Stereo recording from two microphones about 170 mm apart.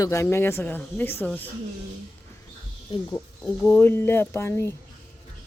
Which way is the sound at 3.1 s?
20° left (ahead or behind).